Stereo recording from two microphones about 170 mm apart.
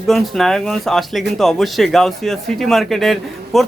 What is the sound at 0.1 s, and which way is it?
Speech, centre (ahead or behind).